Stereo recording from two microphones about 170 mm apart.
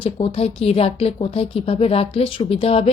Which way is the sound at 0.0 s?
30° left (ahead or behind).